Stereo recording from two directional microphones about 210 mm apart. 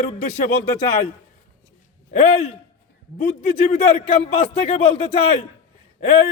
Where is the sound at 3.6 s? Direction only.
30° left (ahead or behind).